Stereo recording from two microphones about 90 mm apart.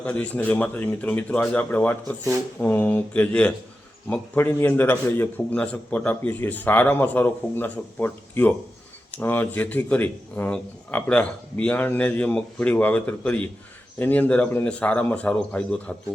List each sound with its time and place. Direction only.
0.0 s speech: 15° left (ahead or behind)